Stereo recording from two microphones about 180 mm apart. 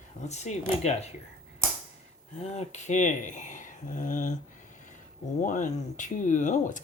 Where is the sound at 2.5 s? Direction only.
40° left (ahead or behind).